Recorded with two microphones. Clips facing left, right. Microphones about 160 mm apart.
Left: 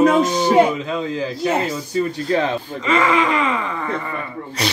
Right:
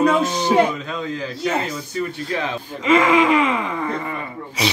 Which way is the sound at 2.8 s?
10° right (ahead or behind).